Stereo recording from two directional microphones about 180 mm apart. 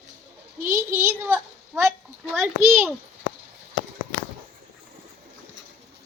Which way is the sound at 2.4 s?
10° right (ahead or behind).